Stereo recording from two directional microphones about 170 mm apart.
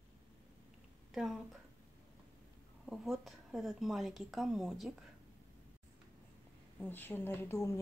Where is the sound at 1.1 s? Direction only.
Centre (ahead or behind).